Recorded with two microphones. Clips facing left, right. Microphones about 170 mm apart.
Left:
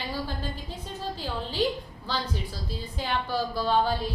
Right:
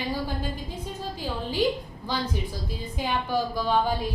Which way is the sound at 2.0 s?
15° right (ahead or behind).